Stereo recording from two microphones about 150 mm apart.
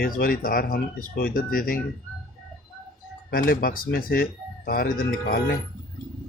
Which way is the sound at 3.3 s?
80° left.